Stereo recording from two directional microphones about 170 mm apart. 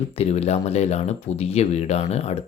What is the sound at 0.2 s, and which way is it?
Speech, 40° left (ahead or behind).